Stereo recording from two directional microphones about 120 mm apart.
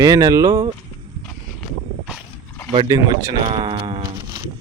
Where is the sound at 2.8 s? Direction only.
30° right (ahead or behind).